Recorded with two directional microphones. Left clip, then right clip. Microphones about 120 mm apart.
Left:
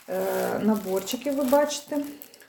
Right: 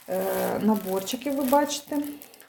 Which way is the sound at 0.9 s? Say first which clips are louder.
Left 1 dB; 25° right (ahead or behind).